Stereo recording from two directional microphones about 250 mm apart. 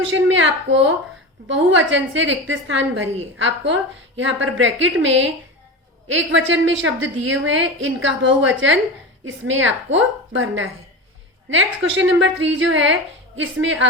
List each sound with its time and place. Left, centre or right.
0.1 s a woman's voice: right